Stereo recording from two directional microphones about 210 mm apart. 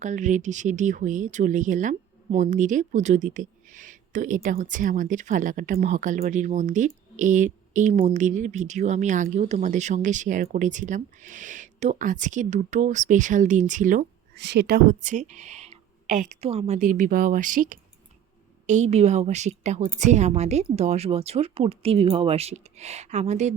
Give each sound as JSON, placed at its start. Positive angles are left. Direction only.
{"t": 0.0, "sound": "speech", "side_deg": -35}
{"t": 14.3, "sound": "speech", "side_deg": -55}